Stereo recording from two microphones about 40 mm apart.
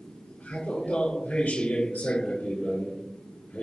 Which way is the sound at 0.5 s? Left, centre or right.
Left.